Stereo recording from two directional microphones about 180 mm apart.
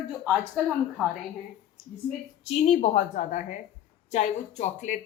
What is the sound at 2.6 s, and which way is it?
A woman's voice, 40° left (ahead or behind).